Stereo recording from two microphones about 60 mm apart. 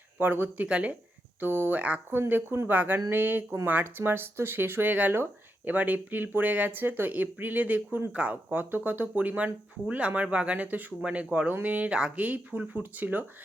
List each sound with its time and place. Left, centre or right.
0.2 s speech: right
1.4 s speech: right
2.6 s speech: right